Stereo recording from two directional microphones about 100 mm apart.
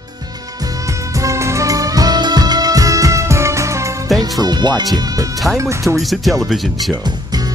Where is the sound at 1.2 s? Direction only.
30° right (ahead or behind).